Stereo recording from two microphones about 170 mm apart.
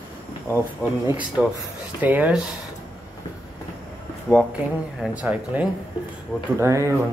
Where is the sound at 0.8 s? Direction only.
5° right (ahead or behind).